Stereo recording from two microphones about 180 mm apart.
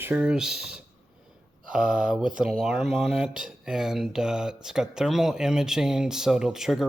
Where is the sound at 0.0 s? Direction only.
5° right (ahead or behind).